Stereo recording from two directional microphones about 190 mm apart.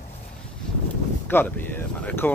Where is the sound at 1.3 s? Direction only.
10° left (ahead or behind).